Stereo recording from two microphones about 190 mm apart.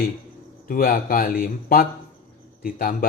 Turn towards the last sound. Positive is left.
turn(degrees=50)  # may be behind; listen again after turning